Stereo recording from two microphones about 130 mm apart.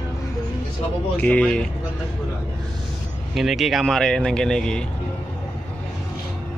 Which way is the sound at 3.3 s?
Centre (ahead or behind).